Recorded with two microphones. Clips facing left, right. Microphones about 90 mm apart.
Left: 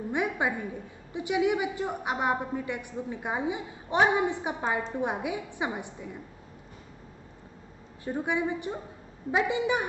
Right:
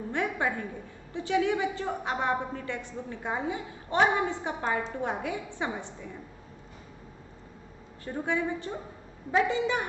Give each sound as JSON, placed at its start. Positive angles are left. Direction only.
{"t": 0.1, "sound": "a woman's voice", "side_deg": 15}
{"t": 8.0, "sound": "a woman's voice", "side_deg": 15}